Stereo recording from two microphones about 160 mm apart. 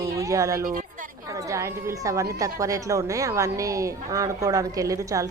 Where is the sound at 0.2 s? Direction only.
20° right (ahead or behind).